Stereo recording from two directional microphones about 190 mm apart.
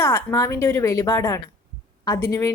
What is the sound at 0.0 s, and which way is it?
A woman's voice, 15° left (ahead or behind).